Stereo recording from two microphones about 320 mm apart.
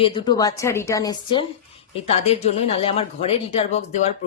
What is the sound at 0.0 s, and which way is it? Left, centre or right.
A woman's voice, centre.